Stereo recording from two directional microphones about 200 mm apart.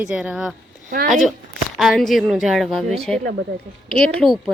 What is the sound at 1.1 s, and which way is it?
A woman's voice, centre (ahead or behind).